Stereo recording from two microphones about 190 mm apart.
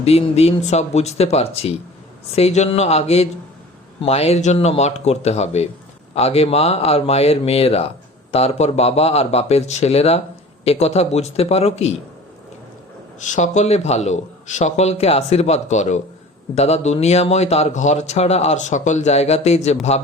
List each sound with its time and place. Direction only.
0.0 s a man's voice: 30° left (ahead or behind)
13.2 s a man's voice: 40° left (ahead or behind)